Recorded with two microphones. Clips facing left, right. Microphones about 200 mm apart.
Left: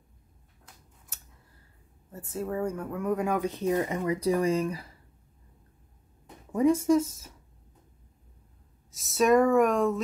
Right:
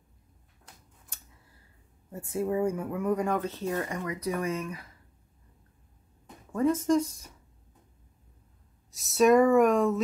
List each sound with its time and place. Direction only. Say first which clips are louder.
1.1 s scissors: even; 5° left (ahead or behind)
2.1 s speech: right 3 dB; 10° right (ahead or behind)
3.3 s speech: left 4 dB; 15° left (ahead or behind); by 4.8 s 35° left (ahead or behind)
6.5 s speech: left 2 dB; 15° left (ahead or behind)
8.9 s speech: right 1 dB; centre (ahead or behind)